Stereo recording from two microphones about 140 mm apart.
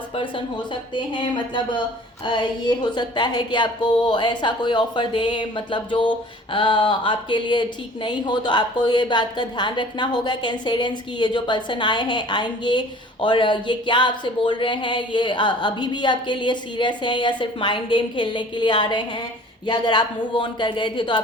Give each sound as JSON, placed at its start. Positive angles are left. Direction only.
{"t": 0.2, "sound": "speech", "side_deg": 35}